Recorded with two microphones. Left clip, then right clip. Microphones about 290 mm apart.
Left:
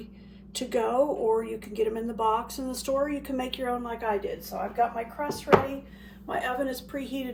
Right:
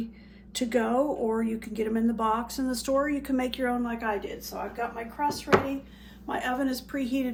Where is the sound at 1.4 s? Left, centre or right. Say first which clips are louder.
Left 2 dB; centre.